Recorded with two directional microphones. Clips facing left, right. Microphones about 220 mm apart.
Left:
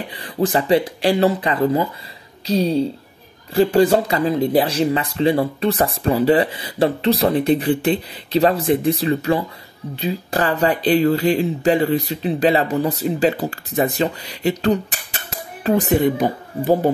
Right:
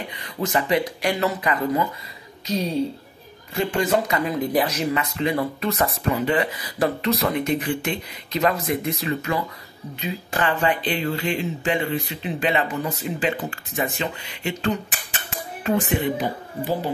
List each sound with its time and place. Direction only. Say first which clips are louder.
0.1 s speech: left 6 dB; 30° left (ahead or behind); by 16.9 s 45° left (ahead or behind)